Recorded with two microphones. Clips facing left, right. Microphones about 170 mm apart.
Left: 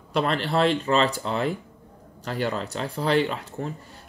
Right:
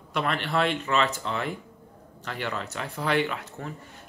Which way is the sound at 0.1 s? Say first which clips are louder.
Left 4 dB; 30° left (ahead or behind).